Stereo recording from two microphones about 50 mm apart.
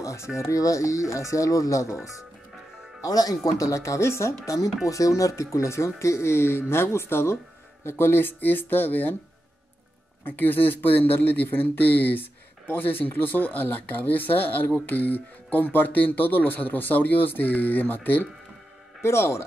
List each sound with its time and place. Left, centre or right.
0.0 s music: left
0.4 s speech: left
3.5 s speech: left
4.8 s speech: left
10.2 s speech: left
19.0 s a man's voice: left